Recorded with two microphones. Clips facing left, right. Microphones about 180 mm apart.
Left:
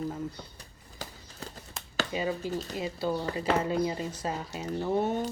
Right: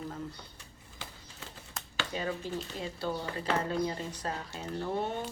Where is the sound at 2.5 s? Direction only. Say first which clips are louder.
Left 3 dB; 40° left (ahead or behind).